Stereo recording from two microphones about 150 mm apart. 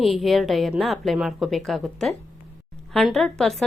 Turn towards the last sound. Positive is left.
turn(degrees=0)  # may be behind; listen again after turning